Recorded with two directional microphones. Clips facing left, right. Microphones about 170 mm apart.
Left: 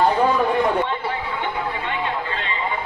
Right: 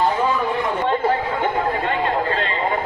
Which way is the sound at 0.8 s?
40° right (ahead or behind).